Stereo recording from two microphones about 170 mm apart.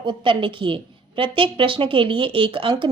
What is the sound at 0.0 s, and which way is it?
A woman's voice, 30° right (ahead or behind).